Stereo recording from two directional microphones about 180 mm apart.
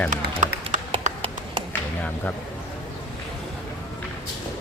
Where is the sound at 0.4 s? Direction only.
45° right (ahead or behind).